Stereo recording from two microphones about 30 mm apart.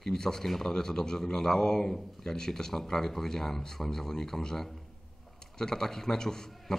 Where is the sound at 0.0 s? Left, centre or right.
Centre.